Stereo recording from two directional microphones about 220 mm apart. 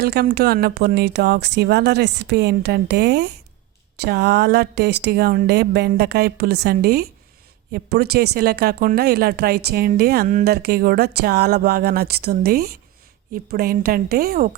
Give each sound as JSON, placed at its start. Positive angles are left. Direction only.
{"t": 0.0, "sound": "speech", "side_deg": -45}